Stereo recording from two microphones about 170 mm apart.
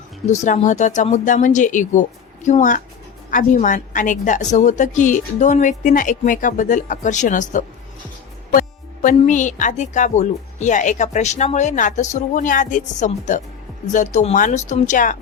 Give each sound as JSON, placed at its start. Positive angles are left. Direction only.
{"t": 0.3, "sound": "speech", "side_deg": 45}